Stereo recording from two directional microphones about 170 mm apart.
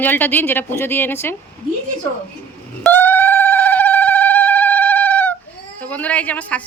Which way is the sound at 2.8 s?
10° left (ahead or behind).